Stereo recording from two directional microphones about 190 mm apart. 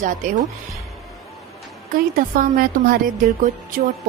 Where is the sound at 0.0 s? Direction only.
40° right (ahead or behind).